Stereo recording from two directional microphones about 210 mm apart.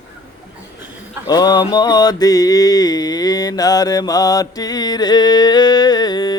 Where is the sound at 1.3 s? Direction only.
20° left (ahead or behind).